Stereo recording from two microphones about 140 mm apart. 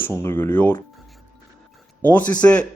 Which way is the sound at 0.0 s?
20° left (ahead or behind).